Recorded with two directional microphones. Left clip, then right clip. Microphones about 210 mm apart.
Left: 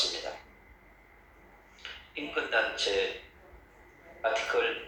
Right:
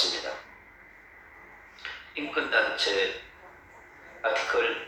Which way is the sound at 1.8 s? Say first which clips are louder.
Right 4 dB; 15° right (ahead or behind).